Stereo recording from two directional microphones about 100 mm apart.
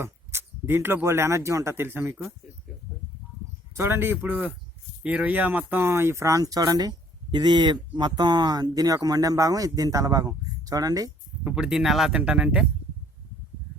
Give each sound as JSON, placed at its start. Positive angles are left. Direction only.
{"t": 0.0, "sound": "speech", "side_deg": -25}
{"t": 3.8, "sound": "a man's voice", "side_deg": -25}
{"t": 11.5, "sound": "speech", "side_deg": -5}